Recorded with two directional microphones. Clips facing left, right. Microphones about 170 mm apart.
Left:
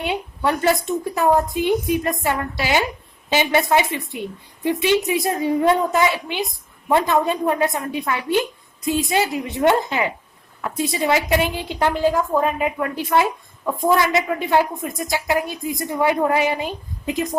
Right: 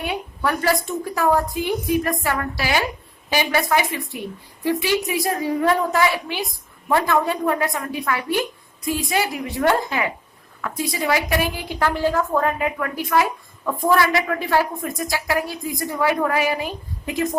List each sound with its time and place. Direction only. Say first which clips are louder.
0.0 s a woman's voice: left 2 dB; 25° left (ahead or behind)